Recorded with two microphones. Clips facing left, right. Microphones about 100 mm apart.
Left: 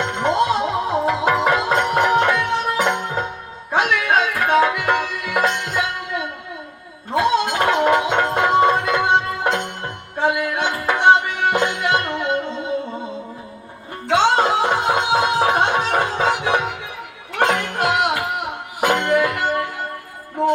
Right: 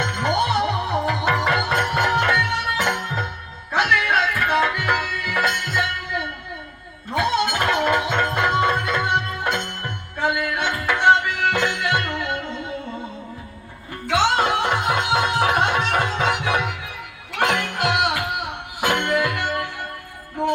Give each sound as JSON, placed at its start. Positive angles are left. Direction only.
{"t": 0.0, "sound": "music", "side_deg": 25}
{"t": 2.3, "sound": "music", "side_deg": 30}
{"t": 7.1, "sound": "gargling", "side_deg": 25}
{"t": 7.6, "sound": "music", "side_deg": 20}
{"t": 14.1, "sound": "music", "side_deg": 25}